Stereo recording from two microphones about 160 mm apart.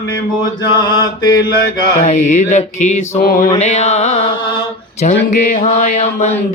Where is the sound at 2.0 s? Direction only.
50° left (ahead or behind).